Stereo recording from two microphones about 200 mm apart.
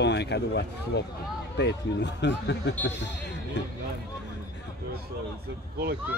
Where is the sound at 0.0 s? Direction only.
60° left (ahead or behind).